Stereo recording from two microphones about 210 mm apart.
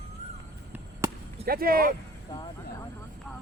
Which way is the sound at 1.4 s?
45° right (ahead or behind).